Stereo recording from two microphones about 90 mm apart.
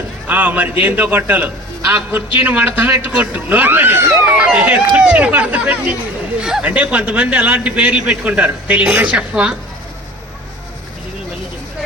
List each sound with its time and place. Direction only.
0.3 s a man's voice: 20° right (ahead or behind)
4.3 s speech: 10° right (ahead or behind)